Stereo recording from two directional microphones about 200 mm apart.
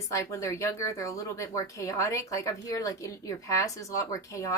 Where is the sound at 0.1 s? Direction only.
15° left (ahead or behind).